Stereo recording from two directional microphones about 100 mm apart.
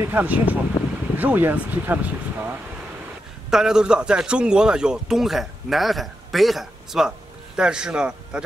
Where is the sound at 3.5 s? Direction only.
5° right (ahead or behind).